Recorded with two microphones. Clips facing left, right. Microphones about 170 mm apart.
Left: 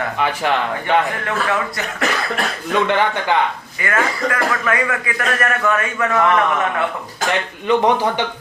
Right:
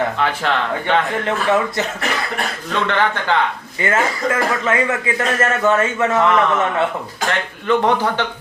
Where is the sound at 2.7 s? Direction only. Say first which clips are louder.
Left 3 dB; 15° left (ahead or behind).